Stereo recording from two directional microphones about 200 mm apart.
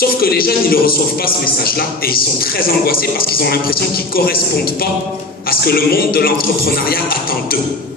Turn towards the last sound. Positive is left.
turn(degrees=50)  # may be behind; listen again after turning